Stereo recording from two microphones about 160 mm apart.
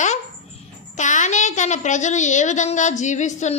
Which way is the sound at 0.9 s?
50° left (ahead or behind).